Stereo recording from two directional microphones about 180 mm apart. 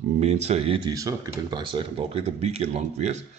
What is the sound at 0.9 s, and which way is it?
A man's voice, 20° right (ahead or behind).